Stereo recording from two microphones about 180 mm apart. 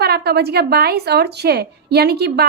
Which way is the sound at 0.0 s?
60° right (ahead or behind).